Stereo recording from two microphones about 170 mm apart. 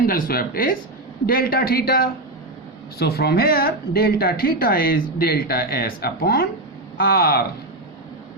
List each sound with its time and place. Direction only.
0.0 s speech: 60° left (ahead or behind)